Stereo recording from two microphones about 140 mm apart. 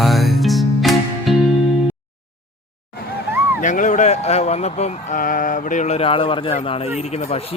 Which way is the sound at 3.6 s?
65° left (ahead or behind).